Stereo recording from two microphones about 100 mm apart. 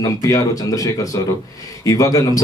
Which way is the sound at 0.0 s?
35° left (ahead or behind).